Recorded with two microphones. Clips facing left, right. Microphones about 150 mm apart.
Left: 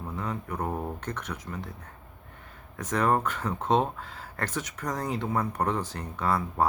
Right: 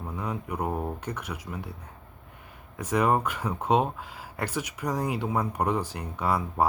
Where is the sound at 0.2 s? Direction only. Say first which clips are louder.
Right 1 dB; 10° right (ahead or behind).